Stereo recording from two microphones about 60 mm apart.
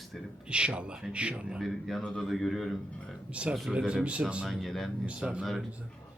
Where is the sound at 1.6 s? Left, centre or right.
Centre.